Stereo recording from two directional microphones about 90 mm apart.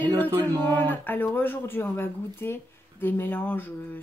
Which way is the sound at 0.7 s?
20° left (ahead or behind).